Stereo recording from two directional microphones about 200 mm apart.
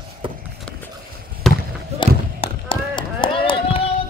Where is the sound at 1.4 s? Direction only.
Centre (ahead or behind).